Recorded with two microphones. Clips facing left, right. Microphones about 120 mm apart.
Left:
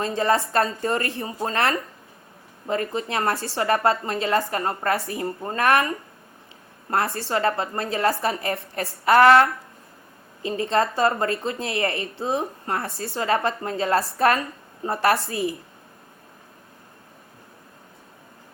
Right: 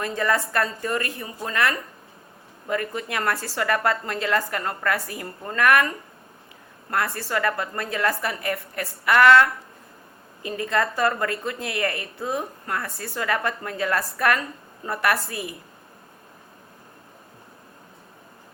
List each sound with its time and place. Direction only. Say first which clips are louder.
0.0 s a woman's voice: left 3 dB; 25° left (ahead or behind)
6.9 s a woman's voice: left 2 dB; 30° left (ahead or behind)